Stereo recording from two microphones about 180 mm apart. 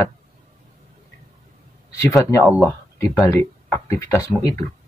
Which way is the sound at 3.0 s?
15° left (ahead or behind).